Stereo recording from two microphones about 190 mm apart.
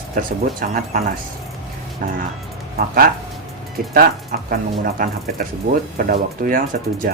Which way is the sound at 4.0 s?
55° right (ahead or behind).